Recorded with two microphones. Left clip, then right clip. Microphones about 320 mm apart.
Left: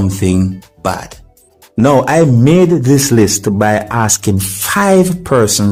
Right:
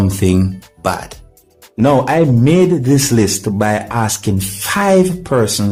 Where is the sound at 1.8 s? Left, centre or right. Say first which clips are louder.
Left 3 dB; right.